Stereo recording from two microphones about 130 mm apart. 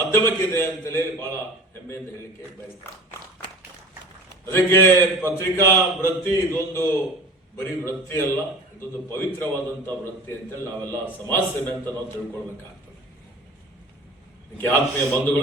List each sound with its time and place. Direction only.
0.1 s a man's voice: 15° left (ahead or behind)
2.8 s a man's voice: 15° left (ahead or behind)
4.4 s a man's voice: 20° left (ahead or behind)
14.6 s a man's voice: 15° left (ahead or behind)